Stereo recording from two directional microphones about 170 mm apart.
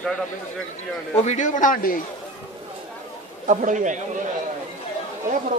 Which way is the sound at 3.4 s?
45° right (ahead or behind).